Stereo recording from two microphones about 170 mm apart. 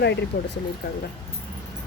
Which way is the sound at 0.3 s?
90° left.